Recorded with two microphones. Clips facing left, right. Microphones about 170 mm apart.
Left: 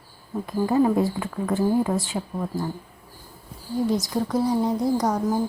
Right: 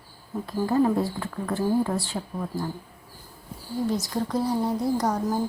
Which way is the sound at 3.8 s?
15° left (ahead or behind).